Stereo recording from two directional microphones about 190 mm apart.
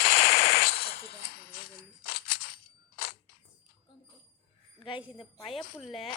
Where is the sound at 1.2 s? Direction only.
55° left (ahead or behind).